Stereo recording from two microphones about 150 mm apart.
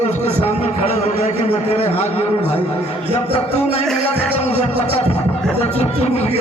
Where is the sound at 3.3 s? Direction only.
40° left (ahead or behind).